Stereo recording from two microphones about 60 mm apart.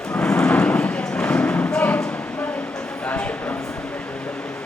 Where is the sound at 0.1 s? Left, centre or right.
Centre.